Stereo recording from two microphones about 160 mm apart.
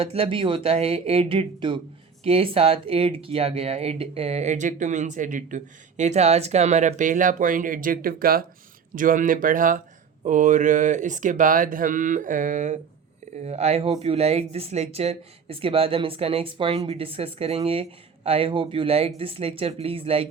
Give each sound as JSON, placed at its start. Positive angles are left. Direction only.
{"t": 0.0, "sound": "speech", "side_deg": -35}